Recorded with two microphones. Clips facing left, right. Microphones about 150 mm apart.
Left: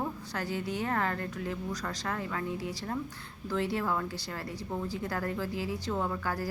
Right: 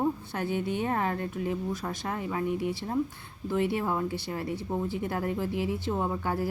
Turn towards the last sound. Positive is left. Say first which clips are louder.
# right 3 dB
turn(degrees=-25)  # may be behind; listen again after turning